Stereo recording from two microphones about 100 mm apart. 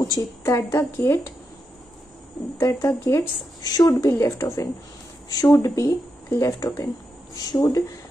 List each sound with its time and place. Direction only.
0.0 s speech: 35° left (ahead or behind)
2.5 s speech: 30° left (ahead or behind)
3.6 s speech: 40° left (ahead or behind)